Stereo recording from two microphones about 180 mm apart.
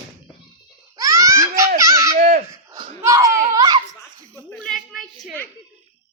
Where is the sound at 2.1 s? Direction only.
45° right (ahead or behind).